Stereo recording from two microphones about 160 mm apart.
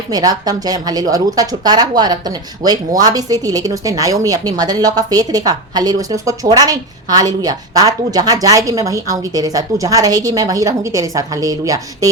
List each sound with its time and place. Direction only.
0.1 s a woman's voice: 25° right (ahead or behind)